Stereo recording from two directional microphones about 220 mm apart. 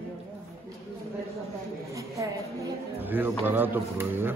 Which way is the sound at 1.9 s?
15° right (ahead or behind).